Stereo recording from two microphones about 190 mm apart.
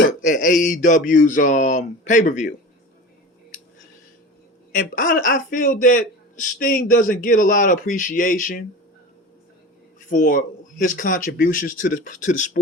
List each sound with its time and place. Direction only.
0.0 s a sound: 45° left (ahead or behind)
4.7 s a man's voice: 45° left (ahead or behind)
10.0 s a man's voice: 45° left (ahead or behind)